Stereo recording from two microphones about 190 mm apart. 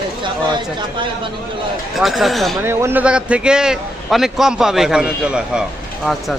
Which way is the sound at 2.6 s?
10° right (ahead or behind).